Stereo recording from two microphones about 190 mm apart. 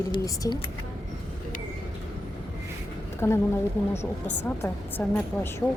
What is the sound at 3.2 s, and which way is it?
Speech, 15° left (ahead or behind).